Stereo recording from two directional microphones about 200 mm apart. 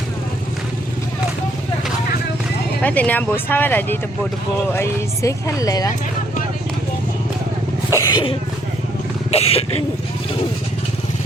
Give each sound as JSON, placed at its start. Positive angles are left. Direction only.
{"t": 2.8, "sound": "speech", "side_deg": 5}
{"t": 7.9, "sound": "speech", "side_deg": 20}